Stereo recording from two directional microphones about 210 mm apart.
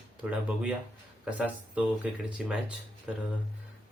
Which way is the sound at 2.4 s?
5° right (ahead or behind).